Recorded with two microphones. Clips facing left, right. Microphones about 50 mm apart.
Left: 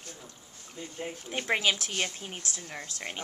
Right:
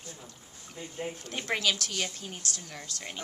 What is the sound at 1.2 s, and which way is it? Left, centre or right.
Speech, centre.